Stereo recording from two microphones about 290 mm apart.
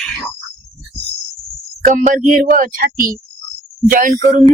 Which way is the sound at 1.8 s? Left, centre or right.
Right.